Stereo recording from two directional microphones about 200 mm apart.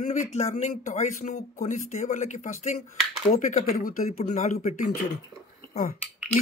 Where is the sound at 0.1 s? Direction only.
35° left (ahead or behind).